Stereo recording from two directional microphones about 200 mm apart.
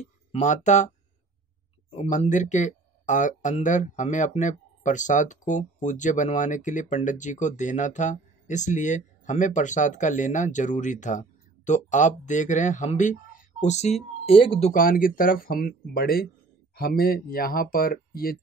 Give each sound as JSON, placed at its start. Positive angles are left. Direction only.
{"t": 0.0, "sound": "speech", "side_deg": 35}
{"t": 2.0, "sound": "speech", "side_deg": 40}
{"t": 14.7, "sound": "speech", "side_deg": 45}